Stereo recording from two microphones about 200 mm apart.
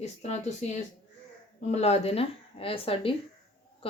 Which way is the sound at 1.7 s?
30° left (ahead or behind).